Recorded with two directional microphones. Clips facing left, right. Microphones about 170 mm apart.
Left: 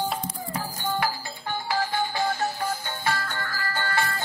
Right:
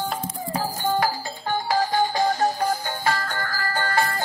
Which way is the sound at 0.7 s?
45° right (ahead or behind).